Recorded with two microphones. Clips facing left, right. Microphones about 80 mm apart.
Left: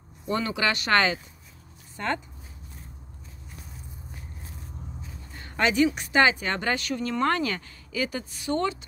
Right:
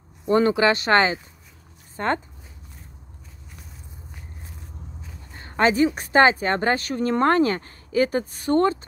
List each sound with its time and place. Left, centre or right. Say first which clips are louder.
0.3 s speech: right 8 dB; right
5.3 s speech: right 5 dB; right